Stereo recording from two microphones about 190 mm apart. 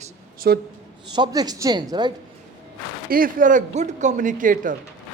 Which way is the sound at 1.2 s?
20° right (ahead or behind).